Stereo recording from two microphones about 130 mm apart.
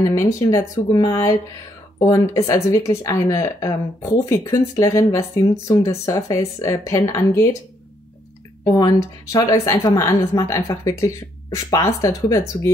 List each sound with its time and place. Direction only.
0.1 s a woman's voice: 25° left (ahead or behind)
8.6 s a woman's voice: 30° left (ahead or behind)